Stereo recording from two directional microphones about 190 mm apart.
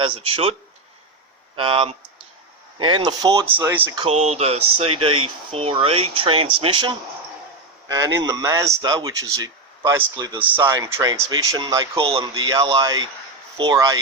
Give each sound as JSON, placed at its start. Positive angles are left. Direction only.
{"t": 0.0, "sound": "a man's voice", "side_deg": -30}
{"t": 1.5, "sound": "a man's voice", "side_deg": -30}
{"t": 3.9, "sound": "a man's voice", "side_deg": -35}